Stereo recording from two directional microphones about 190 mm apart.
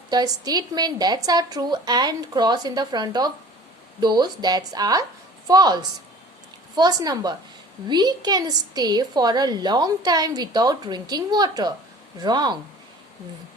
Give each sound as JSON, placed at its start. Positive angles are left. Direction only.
{"t": 0.1, "sound": "a woman's voice", "side_deg": -20}